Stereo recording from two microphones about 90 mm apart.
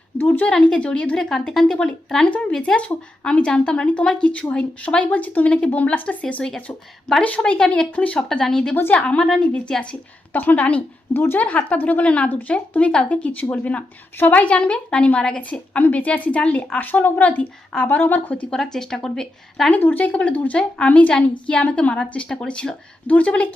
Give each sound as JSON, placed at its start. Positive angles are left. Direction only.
{"t": 0.2, "sound": "speech", "side_deg": 20}
{"t": 10.3, "sound": "speech", "side_deg": 20}
{"t": 18.5, "sound": "speech", "side_deg": 5}
{"t": 19.8, "sound": "speech", "side_deg": 20}